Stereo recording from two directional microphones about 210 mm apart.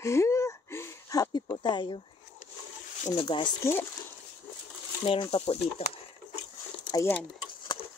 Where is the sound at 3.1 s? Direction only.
20° left (ahead or behind).